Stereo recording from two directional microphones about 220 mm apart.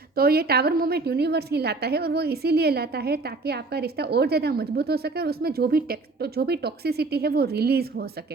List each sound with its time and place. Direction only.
0.2 s a woman's voice: 45° right (ahead or behind)